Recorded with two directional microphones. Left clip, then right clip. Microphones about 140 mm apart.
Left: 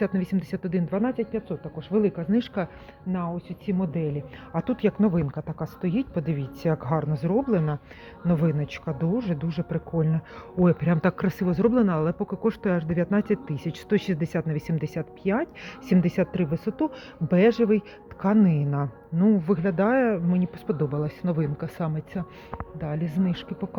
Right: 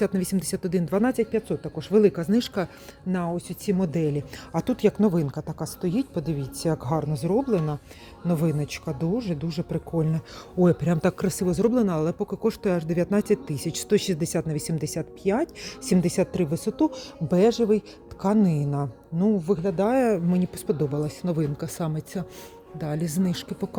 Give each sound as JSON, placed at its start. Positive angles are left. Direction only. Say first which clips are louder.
{"t": 0.0, "sound": "speech", "louder": "right 2 dB", "side_deg": -40}
{"t": 2.3, "sound": "speech", "louder": "right 1 dB", "side_deg": -50}
{"t": 3.1, "sound": "speech", "louder": "right 3 dB", "side_deg": -80}
{"t": 4.5, "sound": "speech", "louder": "right 2 dB", "side_deg": -45}
{"t": 20.0, "sound": "speech", "louder": "right 1 dB", "side_deg": -40}
{"t": 20.7, "sound": "speech", "louder": "right 2 dB", "side_deg": -30}